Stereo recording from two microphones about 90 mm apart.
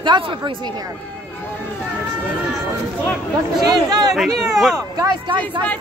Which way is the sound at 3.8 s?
50° right (ahead or behind).